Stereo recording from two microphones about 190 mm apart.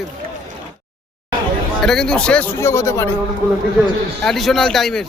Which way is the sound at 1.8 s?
5° left (ahead or behind).